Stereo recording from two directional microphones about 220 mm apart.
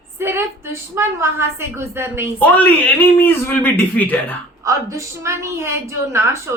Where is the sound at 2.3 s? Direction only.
5° left (ahead or behind).